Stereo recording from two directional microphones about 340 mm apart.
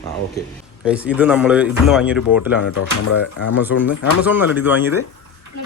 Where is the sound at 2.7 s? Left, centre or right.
Left.